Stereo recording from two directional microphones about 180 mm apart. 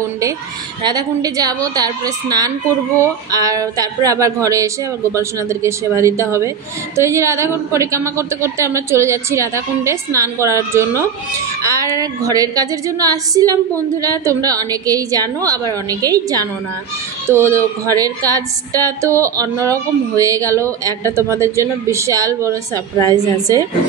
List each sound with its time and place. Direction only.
0.8 s a woman's voice: 20° right (ahead or behind)
22.9 s a woman's voice: 15° left (ahead or behind)